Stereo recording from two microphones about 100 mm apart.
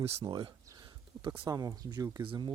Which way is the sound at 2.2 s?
60° right (ahead or behind).